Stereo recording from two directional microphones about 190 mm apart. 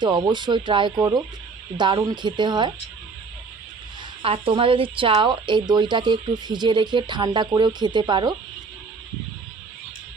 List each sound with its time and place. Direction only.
0.0 s speech: 25° right (ahead or behind)
4.2 s speech: 30° right (ahead or behind)